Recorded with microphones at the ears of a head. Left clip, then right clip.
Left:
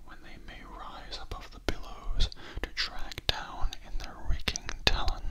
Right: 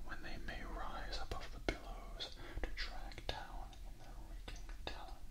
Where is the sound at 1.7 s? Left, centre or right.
Left.